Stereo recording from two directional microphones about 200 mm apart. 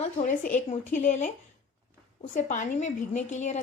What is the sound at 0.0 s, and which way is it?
A woman's voice, 40° left (ahead or behind).